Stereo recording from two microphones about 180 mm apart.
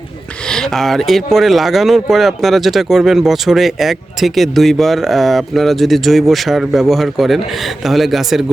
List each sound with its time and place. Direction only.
0.4 s speech: 5° left (ahead or behind)